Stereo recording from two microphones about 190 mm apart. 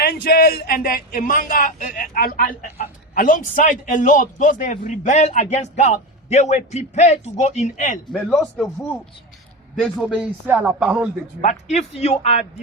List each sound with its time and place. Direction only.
0.0 s speech: 55° left (ahead or behind); by 7.9 s 40° left (ahead or behind)
8.1 s speech: centre (ahead or behind)
10.4 s speech: 10° right (ahead or behind)
11.3 s a man's voice: 35° left (ahead or behind)